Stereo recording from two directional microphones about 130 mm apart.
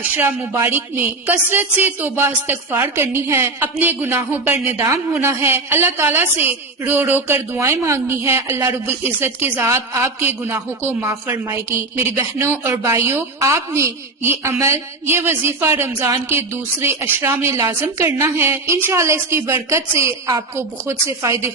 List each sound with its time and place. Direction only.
0.1 s a woman's voice: 15° right (ahead or behind)